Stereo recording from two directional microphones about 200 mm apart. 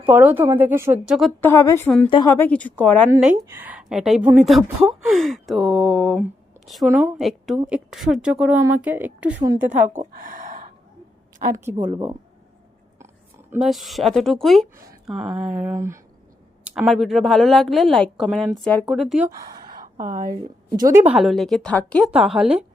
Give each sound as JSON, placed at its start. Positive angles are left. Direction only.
{"t": 0.0, "sound": "a woman's voice", "side_deg": -10}
{"t": 1.4, "sound": "speech", "side_deg": 15}
{"t": 2.0, "sound": "a woman's voice", "side_deg": 25}
{"t": 2.3, "sound": "speech", "side_deg": 10}
{"t": 3.4, "sound": "a woman's voice", "side_deg": -10}
{"t": 10.0, "sound": "a sound", "side_deg": -40}
{"t": 11.5, "sound": "a woman's voice", "side_deg": -10}
{"t": 13.5, "sound": "a woman's voice", "side_deg": 0}
{"t": 16.6, "sound": "a woman's voice", "side_deg": 0}
{"t": 19.4, "sound": "gasp", "side_deg": -45}
{"t": 21.1, "sound": "a woman's voice", "side_deg": 0}